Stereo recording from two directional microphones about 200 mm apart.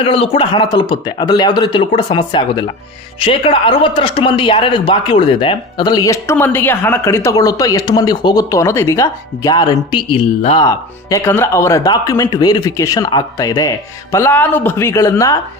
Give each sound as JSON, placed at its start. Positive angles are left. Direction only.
{"t": 0.0, "sound": "speech", "side_deg": 25}
{"t": 10.7, "sound": "speech", "side_deg": 15}